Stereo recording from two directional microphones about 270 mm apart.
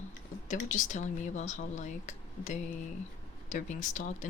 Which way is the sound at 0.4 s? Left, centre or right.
Left.